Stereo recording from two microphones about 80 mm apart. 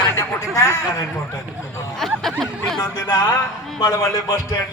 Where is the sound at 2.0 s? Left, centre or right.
Centre.